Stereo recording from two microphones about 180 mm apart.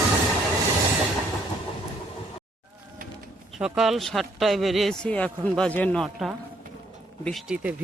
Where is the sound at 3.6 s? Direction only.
Centre (ahead or behind).